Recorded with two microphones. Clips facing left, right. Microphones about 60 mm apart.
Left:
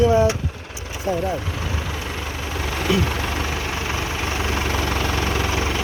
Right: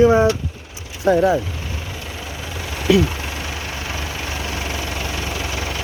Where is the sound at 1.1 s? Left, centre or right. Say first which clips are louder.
Right 8 dB; right.